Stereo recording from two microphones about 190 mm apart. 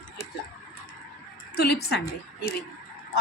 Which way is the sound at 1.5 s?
55° left (ahead or behind).